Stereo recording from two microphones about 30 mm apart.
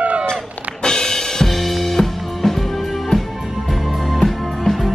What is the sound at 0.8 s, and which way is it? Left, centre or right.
Drum kit, left.